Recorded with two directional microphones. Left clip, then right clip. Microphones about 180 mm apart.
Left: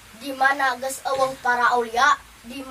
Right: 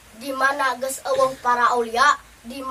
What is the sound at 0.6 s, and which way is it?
A woman's voice, 15° right (ahead or behind).